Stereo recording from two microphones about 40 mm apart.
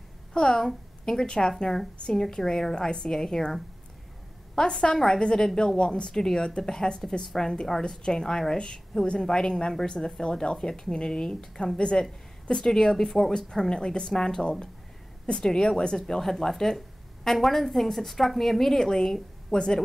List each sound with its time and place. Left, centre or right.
0.3 s a woman's voice: centre
4.6 s a woman's voice: left
5.8 s a woman's voice: left